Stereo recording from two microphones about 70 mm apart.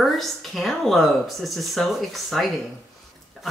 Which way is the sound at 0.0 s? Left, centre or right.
Centre.